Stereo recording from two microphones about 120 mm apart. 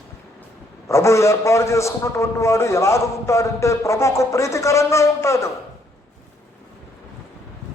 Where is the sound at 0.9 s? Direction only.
25° left (ahead or behind).